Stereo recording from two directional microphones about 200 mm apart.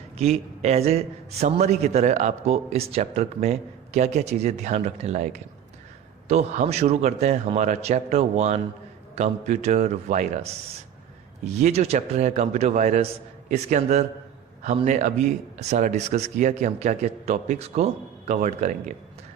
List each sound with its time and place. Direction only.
0.2 s a man's voice: 35° right (ahead or behind)
11.6 s a man's voice: 35° right (ahead or behind)